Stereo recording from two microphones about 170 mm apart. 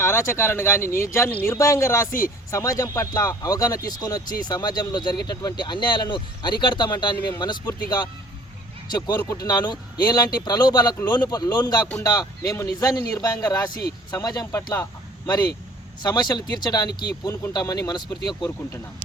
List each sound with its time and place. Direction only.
0.0 s speech: 15° left (ahead or behind)
16.0 s speech: 25° left (ahead or behind)